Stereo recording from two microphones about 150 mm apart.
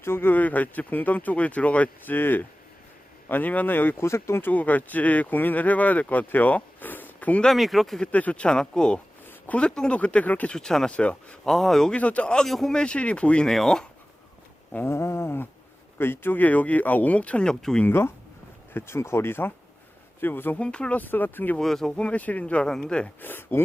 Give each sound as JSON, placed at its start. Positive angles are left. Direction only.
{"t": 0.0, "sound": "speech", "side_deg": 15}
{"t": 14.7, "sound": "speech", "side_deg": 15}
{"t": 17.8, "sound": "speech", "side_deg": 15}